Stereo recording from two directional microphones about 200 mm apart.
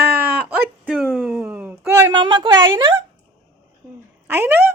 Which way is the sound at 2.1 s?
25° right (ahead or behind).